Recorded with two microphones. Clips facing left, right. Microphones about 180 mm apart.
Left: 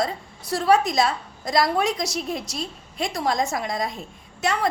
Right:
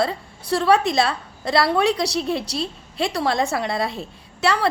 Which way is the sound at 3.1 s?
65° right (ahead or behind).